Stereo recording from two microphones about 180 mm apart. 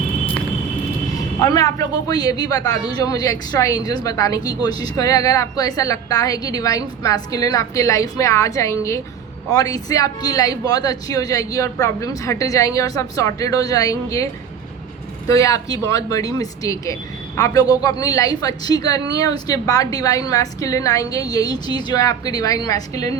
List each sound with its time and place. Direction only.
1.4 s speech: 20° left (ahead or behind)
15.3 s speech: 20° left (ahead or behind)